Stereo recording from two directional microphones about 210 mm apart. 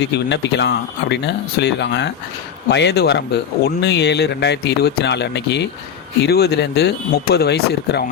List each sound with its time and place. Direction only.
0.0 s speech: 55° left (ahead or behind)